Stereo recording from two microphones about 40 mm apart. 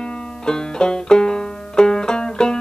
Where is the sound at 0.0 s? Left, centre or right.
Left.